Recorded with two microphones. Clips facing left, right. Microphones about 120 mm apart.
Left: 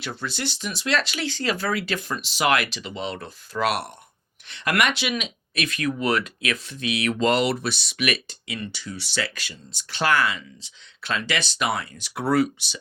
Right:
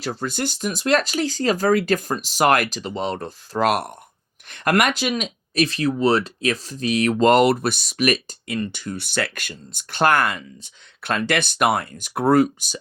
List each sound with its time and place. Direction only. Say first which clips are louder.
0.0 s speech: right 5 dB; 40° right (ahead or behind)